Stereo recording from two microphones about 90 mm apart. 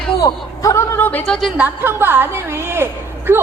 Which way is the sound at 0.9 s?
20° left (ahead or behind).